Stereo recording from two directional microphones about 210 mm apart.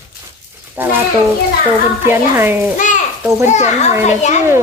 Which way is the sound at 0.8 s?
10° right (ahead or behind).